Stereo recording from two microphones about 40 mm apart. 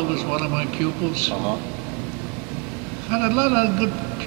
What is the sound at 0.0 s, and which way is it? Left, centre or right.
A man's voice, centre.